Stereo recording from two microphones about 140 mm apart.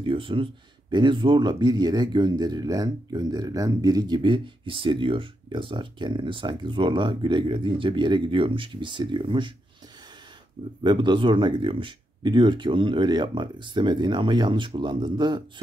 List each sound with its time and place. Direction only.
0.0 s speech: 40° right (ahead or behind)
10.8 s speech: 35° right (ahead or behind)